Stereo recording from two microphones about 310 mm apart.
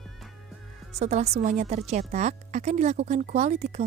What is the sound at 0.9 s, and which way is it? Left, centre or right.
Speech, right.